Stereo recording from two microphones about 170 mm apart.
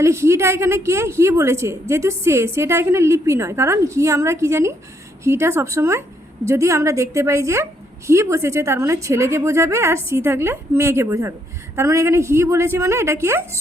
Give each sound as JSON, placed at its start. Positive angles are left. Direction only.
{"t": 0.0, "sound": "a woman's voice", "side_deg": -15}